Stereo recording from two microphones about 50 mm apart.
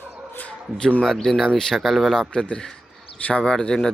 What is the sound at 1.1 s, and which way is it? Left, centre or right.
Speech, centre.